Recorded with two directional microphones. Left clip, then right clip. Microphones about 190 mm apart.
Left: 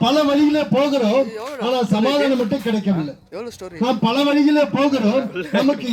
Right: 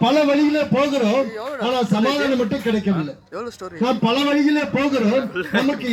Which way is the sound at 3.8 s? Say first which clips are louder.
Left 1 dB; 20° left (ahead or behind).